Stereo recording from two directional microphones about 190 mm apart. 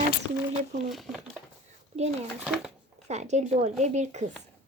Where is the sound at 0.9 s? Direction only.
Centre (ahead or behind).